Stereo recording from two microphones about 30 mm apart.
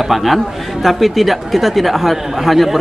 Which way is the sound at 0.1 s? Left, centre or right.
Centre.